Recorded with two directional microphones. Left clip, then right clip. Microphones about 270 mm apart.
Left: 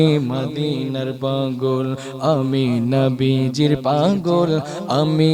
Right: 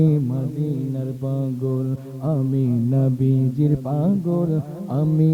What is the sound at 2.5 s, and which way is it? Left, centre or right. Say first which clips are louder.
Mantra: left 4 dB; centre.